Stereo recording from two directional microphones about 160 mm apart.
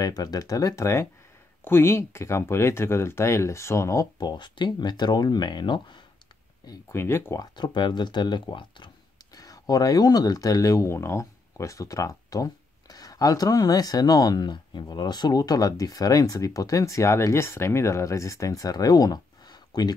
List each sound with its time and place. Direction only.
0.0 s speech: 25° left (ahead or behind)
7.5 s speech: 30° left (ahead or behind)